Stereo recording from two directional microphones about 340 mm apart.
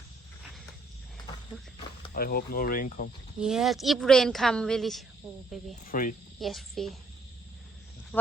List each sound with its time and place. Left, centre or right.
2.1 s speech: left
3.4 s speech: centre
5.8 s speech: left
6.4 s speech: centre
8.1 s speech: centre